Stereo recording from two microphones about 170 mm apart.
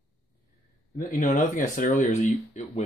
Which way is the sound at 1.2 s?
50° left (ahead or behind).